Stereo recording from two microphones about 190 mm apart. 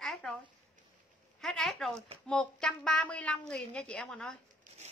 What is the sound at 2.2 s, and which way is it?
A woman's voice, 5° left (ahead or behind).